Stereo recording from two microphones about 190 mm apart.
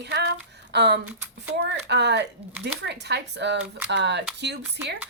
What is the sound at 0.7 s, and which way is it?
Speech, 65° right (ahead or behind).